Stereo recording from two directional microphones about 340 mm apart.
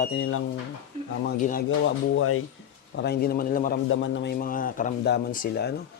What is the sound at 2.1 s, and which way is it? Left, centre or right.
Speech, left.